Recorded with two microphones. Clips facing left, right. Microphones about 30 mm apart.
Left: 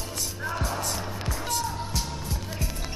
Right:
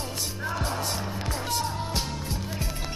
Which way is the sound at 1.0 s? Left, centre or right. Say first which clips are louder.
Right 1 dB; centre.